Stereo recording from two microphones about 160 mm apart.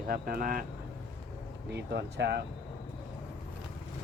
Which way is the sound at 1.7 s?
90° right.